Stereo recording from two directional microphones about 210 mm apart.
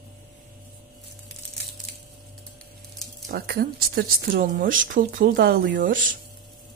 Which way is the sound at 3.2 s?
45° right (ahead or behind).